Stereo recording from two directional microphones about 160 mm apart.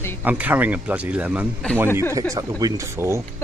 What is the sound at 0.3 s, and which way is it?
Speech, 10° right (ahead or behind).